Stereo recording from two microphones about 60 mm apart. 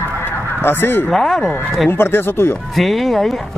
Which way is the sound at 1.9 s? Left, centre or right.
Left.